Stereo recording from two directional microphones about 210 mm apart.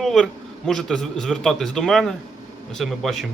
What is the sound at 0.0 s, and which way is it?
Speech, centre (ahead or behind).